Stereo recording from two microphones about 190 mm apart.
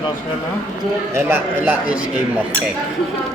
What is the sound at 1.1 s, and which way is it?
Speech, 10° right (ahead or behind).